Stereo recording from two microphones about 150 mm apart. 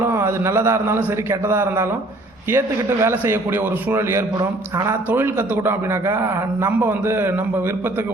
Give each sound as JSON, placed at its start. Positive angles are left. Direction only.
{"t": 0.0, "sound": "a man's voice", "side_deg": -15}